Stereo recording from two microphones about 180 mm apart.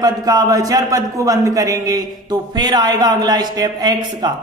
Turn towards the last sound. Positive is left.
turn(degrees=-20)  # may be behind; listen again after turning